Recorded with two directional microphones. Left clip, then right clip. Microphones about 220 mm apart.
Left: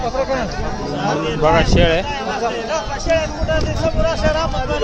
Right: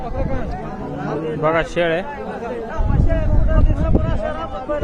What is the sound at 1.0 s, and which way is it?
Speech, 55° left (ahead or behind).